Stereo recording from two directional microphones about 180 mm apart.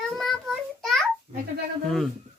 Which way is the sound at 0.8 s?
Centre (ahead or behind).